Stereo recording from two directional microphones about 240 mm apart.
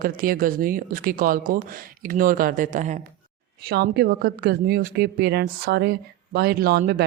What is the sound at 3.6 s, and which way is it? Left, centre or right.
A woman's voice, right.